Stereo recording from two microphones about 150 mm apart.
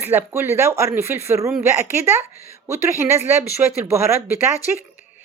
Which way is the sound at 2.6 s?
15° right (ahead or behind).